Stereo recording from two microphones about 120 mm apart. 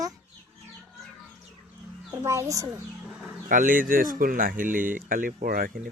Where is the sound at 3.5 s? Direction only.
90° right.